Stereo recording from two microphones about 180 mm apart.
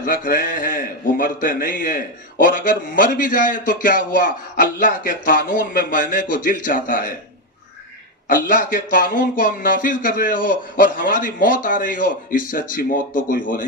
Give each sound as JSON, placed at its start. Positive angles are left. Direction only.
{"t": 0.0, "sound": "a man's voice", "side_deg": 50}
{"t": 8.3, "sound": "a man's voice", "side_deg": 50}